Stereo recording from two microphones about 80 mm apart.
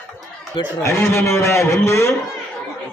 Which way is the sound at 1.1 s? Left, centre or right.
Left.